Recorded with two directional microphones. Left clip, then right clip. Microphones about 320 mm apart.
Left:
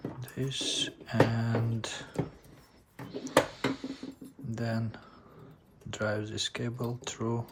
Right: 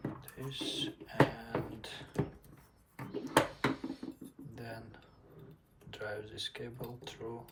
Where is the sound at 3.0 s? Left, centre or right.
Centre.